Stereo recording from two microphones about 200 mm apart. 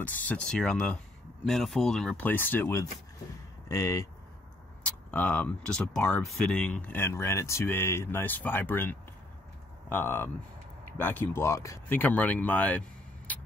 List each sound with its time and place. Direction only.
0.0 s speech: 5° left (ahead or behind)